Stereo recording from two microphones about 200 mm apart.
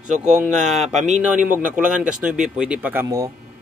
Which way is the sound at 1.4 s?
10° right (ahead or behind).